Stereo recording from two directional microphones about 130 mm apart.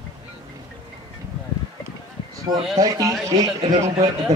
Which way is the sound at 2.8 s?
25° right (ahead or behind).